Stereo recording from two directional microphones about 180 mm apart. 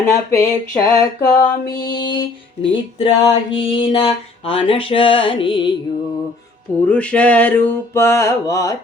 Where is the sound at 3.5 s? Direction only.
30° left (ahead or behind).